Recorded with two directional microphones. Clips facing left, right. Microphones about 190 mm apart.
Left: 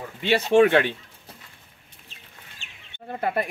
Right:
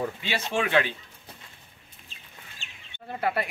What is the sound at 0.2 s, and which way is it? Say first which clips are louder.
Speech: left 11 dB; 60° left (ahead or behind).